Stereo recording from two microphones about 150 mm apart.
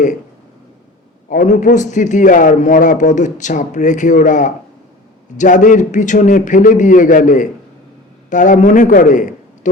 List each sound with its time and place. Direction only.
1.3 s a man's voice: 55° left (ahead or behind)